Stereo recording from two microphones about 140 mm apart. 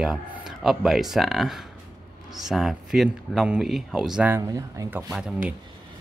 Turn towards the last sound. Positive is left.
turn(degrees=-5)  # may be behind; listen again after turning